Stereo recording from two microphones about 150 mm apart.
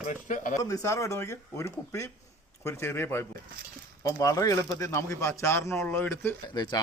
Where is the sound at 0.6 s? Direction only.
20° left (ahead or behind).